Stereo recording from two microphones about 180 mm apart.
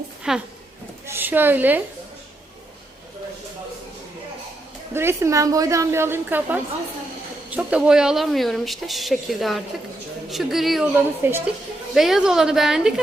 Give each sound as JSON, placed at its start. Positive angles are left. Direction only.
{"t": 0.3, "sound": "a woman's voice", "side_deg": -5}
{"t": 4.9, "sound": "a woman's voice", "side_deg": -15}
{"t": 11.2, "sound": "a woman's voice", "side_deg": -15}
{"t": 11.9, "sound": "a woman's voice", "side_deg": 0}